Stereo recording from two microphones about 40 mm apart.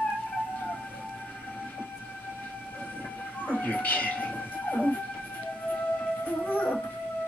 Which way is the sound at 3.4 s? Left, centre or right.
Left.